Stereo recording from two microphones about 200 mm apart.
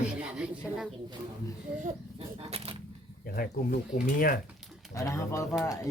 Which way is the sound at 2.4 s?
30° right (ahead or behind).